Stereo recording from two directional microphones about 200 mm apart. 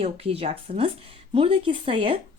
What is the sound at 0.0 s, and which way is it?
A woman's voice, 30° right (ahead or behind).